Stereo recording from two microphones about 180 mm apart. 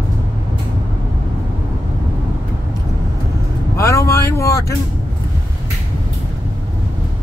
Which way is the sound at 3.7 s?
15° left (ahead or behind).